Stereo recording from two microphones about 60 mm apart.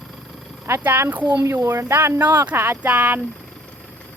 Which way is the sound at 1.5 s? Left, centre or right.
Right.